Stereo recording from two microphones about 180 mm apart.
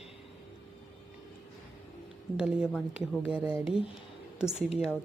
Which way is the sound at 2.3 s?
5° right (ahead or behind).